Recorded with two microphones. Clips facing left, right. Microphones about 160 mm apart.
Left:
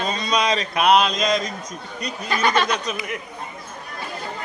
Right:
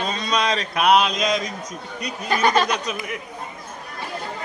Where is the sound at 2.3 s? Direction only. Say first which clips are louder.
Right 2 dB; 40° right (ahead or behind).